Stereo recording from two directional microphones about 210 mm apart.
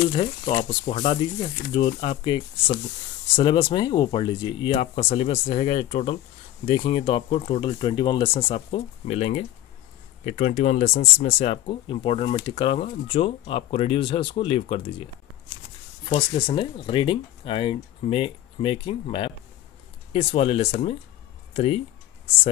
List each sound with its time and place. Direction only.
0.1 s speech: 25° left (ahead or behind)
16.1 s speech: 25° left (ahead or behind)